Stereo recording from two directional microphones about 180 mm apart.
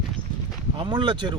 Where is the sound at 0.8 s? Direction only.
25° right (ahead or behind).